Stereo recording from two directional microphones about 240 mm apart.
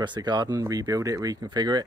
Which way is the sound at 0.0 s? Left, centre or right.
Centre.